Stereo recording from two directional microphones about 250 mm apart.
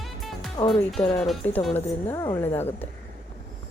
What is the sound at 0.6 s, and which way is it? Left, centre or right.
Speech, centre.